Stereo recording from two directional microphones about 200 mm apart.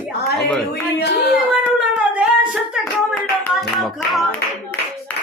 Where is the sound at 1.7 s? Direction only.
Centre (ahead or behind).